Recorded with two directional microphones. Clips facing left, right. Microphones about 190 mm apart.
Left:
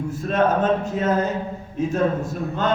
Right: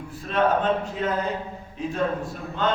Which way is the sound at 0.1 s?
45° left (ahead or behind).